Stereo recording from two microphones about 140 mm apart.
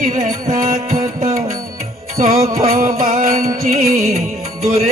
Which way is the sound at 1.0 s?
20° right (ahead or behind).